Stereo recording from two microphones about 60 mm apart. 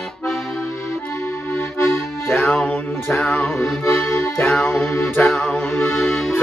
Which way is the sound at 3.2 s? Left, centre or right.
Centre.